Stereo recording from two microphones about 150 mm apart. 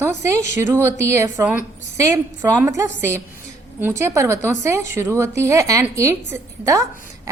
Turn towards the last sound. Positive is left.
turn(degrees=-20)  # may be behind; listen again after turning